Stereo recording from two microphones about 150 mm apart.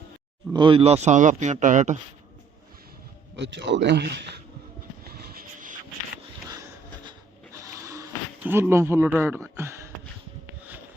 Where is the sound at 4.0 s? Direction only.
90° right.